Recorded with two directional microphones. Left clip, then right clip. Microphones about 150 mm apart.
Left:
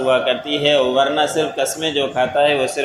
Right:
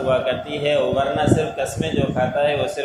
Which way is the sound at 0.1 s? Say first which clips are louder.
Left 3 dB; 35° left (ahead or behind).